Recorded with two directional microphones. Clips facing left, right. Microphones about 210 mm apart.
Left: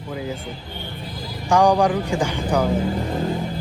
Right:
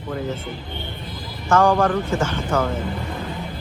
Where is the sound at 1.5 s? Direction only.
15° left (ahead or behind).